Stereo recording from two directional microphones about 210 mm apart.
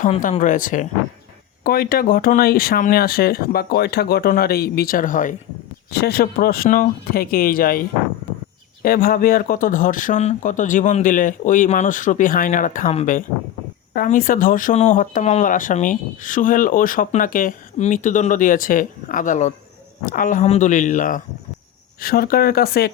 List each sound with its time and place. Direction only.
0.0 s speech: 40° left (ahead or behind)